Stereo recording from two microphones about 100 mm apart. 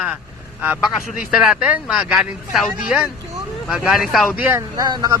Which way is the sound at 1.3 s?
10° right (ahead or behind).